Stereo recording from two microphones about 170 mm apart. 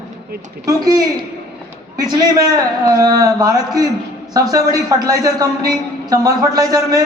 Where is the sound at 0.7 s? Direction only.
20° right (ahead or behind).